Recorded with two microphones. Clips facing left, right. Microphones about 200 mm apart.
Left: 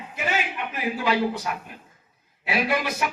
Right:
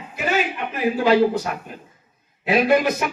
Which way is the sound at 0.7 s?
40° right (ahead or behind).